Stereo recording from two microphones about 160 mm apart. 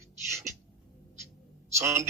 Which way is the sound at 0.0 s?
15° right (ahead or behind).